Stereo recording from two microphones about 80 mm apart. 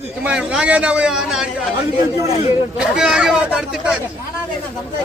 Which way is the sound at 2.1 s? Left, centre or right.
Right.